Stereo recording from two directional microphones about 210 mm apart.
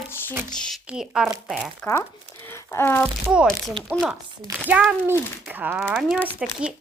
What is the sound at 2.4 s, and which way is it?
Speech, 10° left (ahead or behind).